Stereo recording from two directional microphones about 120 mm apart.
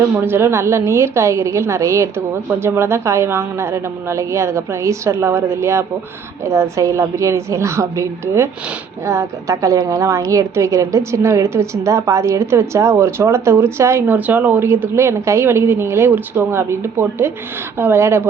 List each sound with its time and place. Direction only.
0.2 s a woman's voice: 20° right (ahead or behind)